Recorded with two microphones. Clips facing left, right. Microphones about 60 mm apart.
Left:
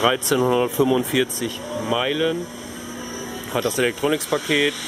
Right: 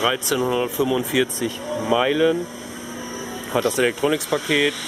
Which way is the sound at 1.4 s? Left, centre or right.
Centre.